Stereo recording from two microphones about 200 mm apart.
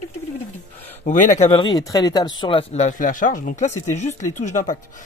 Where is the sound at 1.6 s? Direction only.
20° left (ahead or behind).